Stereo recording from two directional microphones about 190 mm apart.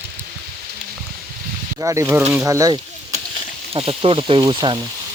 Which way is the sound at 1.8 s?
15° right (ahead or behind).